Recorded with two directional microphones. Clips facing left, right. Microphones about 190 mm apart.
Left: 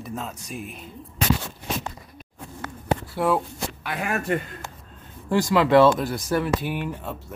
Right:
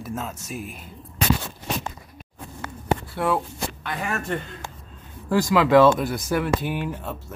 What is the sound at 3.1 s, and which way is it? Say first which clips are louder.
Speech: left 1 dB; 5° left (ahead or behind).